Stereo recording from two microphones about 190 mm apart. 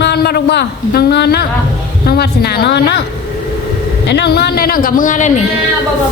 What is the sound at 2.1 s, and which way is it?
Speech, 55° left (ahead or behind).